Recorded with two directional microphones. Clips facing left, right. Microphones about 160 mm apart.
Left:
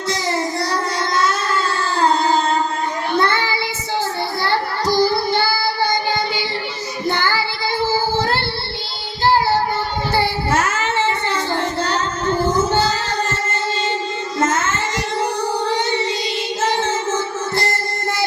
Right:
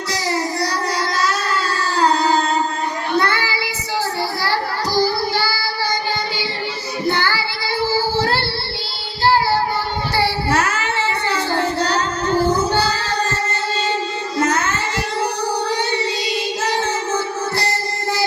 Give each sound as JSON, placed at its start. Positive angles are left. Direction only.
{"t": 0.3, "sound": "a sound", "side_deg": 25}
{"t": 3.2, "sound": "child singing", "side_deg": 25}
{"t": 4.9, "sound": "child singing", "side_deg": 20}
{"t": 5.6, "sound": "child singing", "side_deg": 50}
{"t": 7.1, "sound": "child singing", "side_deg": 50}
{"t": 10.5, "sound": "a sound", "side_deg": 45}
{"t": 11.8, "sound": "child singing", "side_deg": 50}
{"t": 16.6, "sound": "music", "side_deg": 20}